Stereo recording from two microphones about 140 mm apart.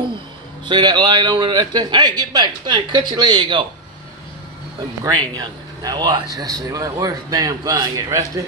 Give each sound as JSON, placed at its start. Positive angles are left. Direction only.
{"t": 0.7, "sound": "a man's voice", "side_deg": -30}
{"t": 5.3, "sound": "a man's voice", "side_deg": -30}